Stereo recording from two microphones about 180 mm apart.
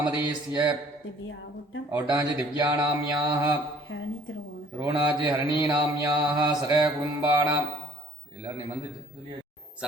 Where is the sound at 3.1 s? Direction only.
20° right (ahead or behind).